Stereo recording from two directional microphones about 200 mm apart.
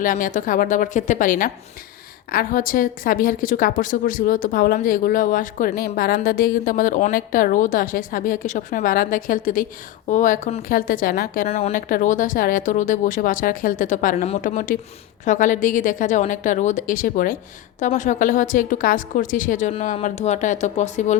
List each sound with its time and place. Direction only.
0.0 s a woman's voice: 40° left (ahead or behind)
11.4 s a woman's voice: 30° left (ahead or behind)
11.7 s a woman's voice: 45° left (ahead or behind)